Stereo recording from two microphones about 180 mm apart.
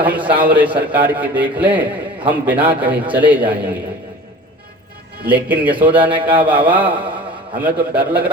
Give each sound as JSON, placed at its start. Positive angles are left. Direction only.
{"t": 0.0, "sound": "a man's voice", "side_deg": -10}
{"t": 5.3, "sound": "a man's voice", "side_deg": -10}